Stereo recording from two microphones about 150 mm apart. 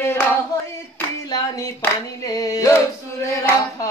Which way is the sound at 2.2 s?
25° left (ahead or behind).